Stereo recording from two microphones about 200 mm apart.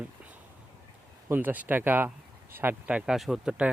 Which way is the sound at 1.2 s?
10° right (ahead or behind).